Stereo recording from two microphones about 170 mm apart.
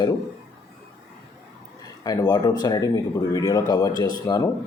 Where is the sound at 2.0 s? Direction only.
25° left (ahead or behind).